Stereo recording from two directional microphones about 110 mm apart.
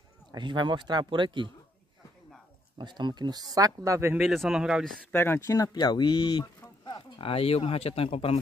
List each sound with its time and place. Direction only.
0.3 s speech: 45° right (ahead or behind)
2.8 s speech: 45° right (ahead or behind); by 4.2 s 25° right (ahead or behind)
4.2 s speech: centre (ahead or behind)
5.1 s speech: 20° left (ahead or behind); by 8.4 s 60° left (ahead or behind)